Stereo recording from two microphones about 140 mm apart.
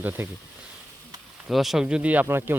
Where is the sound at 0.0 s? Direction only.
15° right (ahead or behind).